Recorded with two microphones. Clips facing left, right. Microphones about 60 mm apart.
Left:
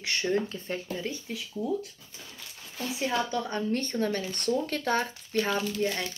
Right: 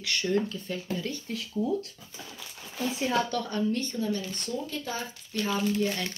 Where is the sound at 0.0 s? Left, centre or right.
Left.